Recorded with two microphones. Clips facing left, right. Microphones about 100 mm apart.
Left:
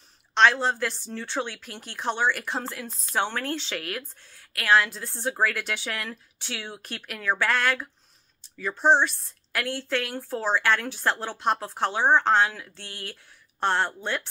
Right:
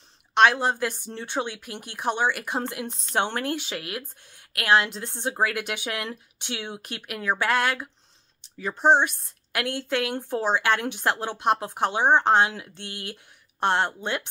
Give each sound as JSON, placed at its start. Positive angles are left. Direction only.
{"t": 0.3, "sound": "a woman's voice", "side_deg": -15}